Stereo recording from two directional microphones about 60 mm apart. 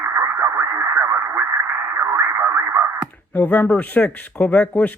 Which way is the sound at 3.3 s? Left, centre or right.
Left.